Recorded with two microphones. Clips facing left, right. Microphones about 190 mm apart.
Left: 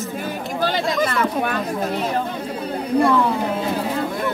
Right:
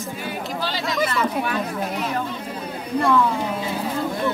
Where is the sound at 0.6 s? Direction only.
50° left (ahead or behind).